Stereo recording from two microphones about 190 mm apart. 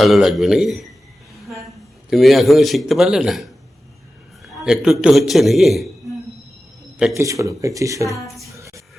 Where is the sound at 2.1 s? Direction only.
Centre (ahead or behind).